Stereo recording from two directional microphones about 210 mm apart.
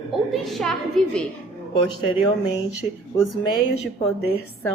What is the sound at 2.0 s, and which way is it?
Speech, 25° left (ahead or behind).